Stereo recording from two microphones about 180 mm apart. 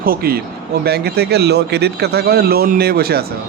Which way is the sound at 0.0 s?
55° right (ahead or behind).